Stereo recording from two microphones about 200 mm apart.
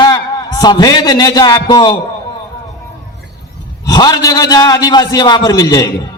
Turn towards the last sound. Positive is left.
turn(degrees=20)  # may be behind; listen again after turning